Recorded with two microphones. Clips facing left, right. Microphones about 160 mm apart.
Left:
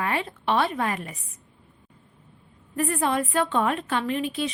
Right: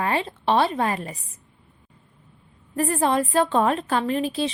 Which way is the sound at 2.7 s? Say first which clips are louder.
Right 3 dB; 35° right (ahead or behind).